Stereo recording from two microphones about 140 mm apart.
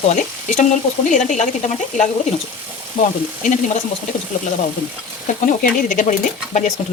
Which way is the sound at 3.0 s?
45° left (ahead or behind).